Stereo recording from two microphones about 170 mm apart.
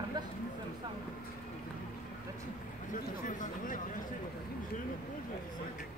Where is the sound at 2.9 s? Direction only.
50° left (ahead or behind).